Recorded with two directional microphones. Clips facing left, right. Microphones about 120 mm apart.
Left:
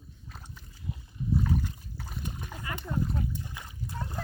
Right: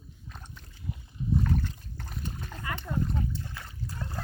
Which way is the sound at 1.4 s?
5° left (ahead or behind).